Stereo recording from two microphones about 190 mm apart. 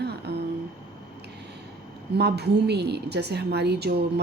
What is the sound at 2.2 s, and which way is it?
A woman's voice, 60° right (ahead or behind).